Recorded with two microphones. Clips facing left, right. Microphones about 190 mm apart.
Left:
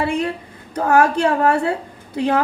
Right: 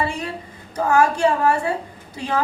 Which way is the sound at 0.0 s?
60° left (ahead or behind).